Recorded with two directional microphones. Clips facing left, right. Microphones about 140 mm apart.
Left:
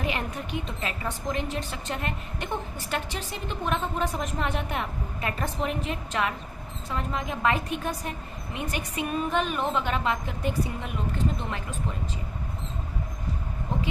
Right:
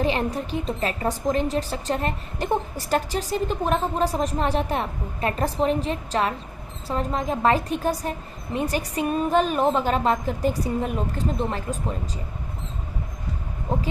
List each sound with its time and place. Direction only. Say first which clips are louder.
0.0 s a woman's voice: right 7 dB; 30° right (ahead or behind)